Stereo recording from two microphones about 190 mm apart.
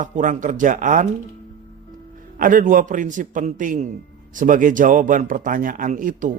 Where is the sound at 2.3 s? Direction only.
45° right (ahead or behind).